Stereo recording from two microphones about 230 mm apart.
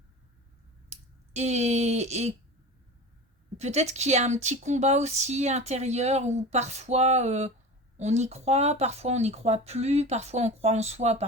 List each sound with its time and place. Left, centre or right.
0.9 s speech: right
3.6 s speech: right